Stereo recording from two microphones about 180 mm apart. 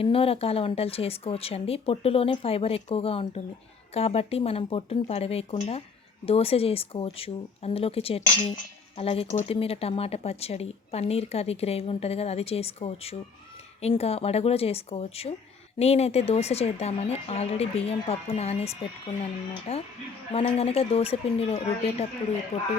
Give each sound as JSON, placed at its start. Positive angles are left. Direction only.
{"t": 0.0, "sound": "speech", "side_deg": 30}